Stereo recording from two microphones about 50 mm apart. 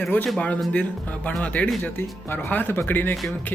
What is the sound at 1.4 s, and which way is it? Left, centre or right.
Speech, left.